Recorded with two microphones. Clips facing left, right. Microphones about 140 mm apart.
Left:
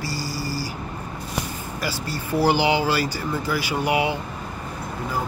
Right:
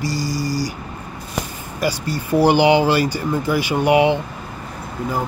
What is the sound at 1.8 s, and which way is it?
Speech, 15° right (ahead or behind).